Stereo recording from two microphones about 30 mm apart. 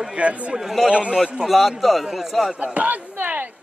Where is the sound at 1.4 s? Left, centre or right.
Centre.